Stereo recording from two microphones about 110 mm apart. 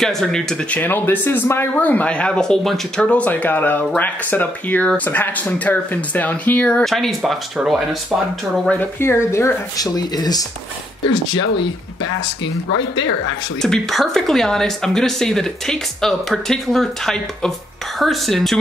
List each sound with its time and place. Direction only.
0.0 s speech: 5° left (ahead or behind)
9.0 s speech: 25° left (ahead or behind)
13.6 s speech: centre (ahead or behind)